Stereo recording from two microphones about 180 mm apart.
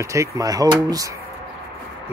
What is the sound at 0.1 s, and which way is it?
Speech, 15° right (ahead or behind).